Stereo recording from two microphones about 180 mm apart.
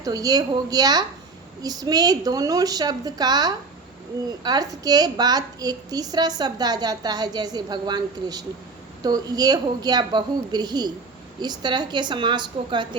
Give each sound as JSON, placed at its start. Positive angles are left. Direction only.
{"t": 0.0, "sound": "a woman's voice", "side_deg": -20}